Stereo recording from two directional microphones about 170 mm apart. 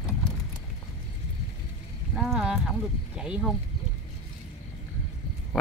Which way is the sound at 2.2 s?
5° right (ahead or behind).